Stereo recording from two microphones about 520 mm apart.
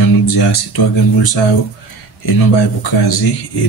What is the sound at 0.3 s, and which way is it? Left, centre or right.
Speech, left.